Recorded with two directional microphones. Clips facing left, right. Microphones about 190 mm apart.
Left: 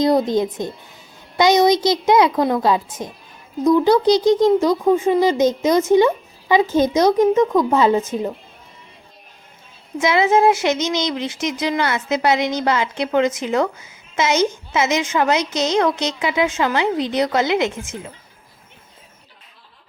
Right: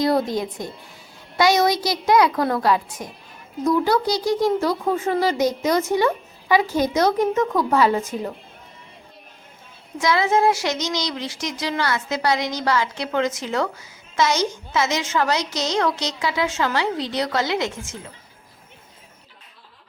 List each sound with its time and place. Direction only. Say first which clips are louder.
0.0 s speech: left 4 dB; 20° left (ahead or behind)
10.0 s speech: left 4 dB; 20° left (ahead or behind)